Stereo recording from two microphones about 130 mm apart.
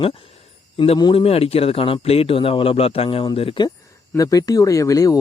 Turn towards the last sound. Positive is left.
turn(degrees=25)  # may be behind; listen again after turning